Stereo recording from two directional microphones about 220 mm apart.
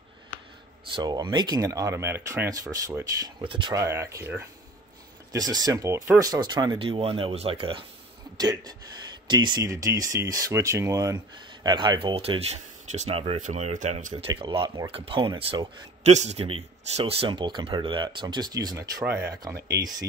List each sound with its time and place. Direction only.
0.9 s speech: 20° right (ahead or behind)
14.3 s speech: 20° right (ahead or behind)